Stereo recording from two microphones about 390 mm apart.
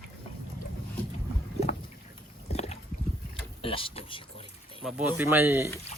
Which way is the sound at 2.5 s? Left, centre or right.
Centre.